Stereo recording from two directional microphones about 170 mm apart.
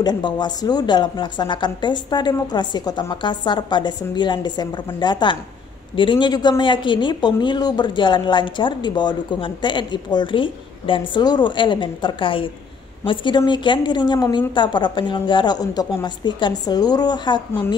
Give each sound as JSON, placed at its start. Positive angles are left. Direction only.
{"t": 0.0, "sound": "speech", "side_deg": 25}